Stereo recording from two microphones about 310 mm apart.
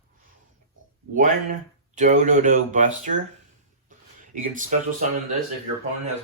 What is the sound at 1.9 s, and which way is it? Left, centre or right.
Speech, right.